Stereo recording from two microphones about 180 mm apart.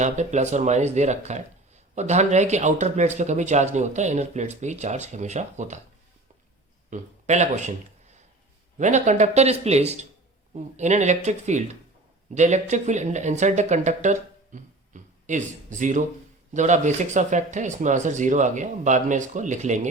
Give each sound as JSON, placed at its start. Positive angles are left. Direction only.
{"t": 0.0, "sound": "speech", "side_deg": -40}
{"t": 6.9, "sound": "speech", "side_deg": -40}